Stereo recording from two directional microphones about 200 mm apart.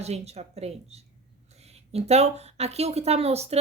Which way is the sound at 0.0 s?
30° right (ahead or behind).